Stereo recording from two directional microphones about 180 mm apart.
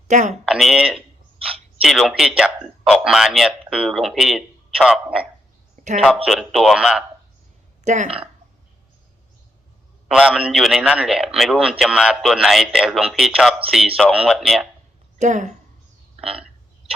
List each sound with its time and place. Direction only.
0.1 s speech: 40° right (ahead or behind)
0.4 s a man's voice: 5° right (ahead or behind)
1.4 s a sound: 30° right (ahead or behind)
1.8 s a man's voice: centre (ahead or behind)
7.9 s speech: 40° right (ahead or behind)
10.1 s a man's voice: 5° right (ahead or behind)
15.2 s speech: 45° right (ahead or behind)